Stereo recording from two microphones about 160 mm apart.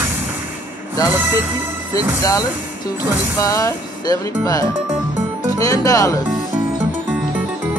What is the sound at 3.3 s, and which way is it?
Music, 20° left (ahead or behind).